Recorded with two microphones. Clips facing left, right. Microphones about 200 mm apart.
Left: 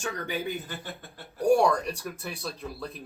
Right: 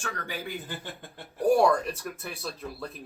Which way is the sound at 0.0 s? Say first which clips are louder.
Left 4 dB; 20° left (ahead or behind).